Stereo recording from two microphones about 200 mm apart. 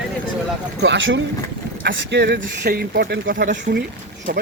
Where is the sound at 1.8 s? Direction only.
60° right (ahead or behind).